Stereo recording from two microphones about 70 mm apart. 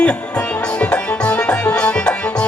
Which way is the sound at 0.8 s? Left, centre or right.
Centre.